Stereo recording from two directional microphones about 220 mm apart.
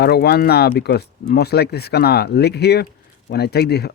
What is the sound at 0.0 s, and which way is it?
Speech, 45° left (ahead or behind).